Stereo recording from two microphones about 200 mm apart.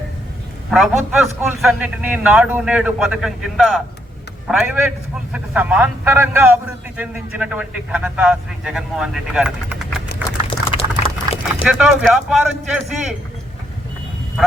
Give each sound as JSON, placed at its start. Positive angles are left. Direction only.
{"t": 0.7, "sound": "a man's voice", "side_deg": 0}
{"t": 10.5, "sound": "a sound", "side_deg": 30}
{"t": 11.6, "sound": "a man's voice", "side_deg": -5}